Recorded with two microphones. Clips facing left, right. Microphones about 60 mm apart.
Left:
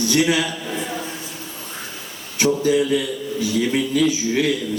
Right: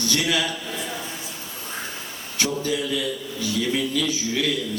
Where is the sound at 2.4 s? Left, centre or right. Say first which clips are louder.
Left 8 dB; left.